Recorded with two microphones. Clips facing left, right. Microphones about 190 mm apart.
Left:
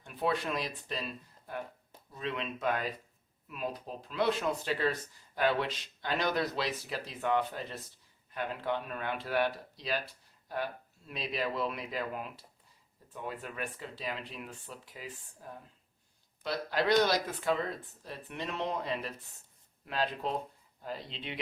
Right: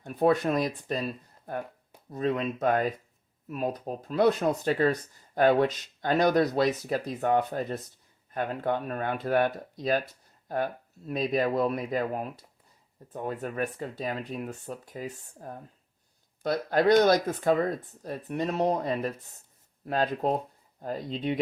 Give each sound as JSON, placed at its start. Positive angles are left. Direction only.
{"t": 0.0, "sound": "speech", "side_deg": -45}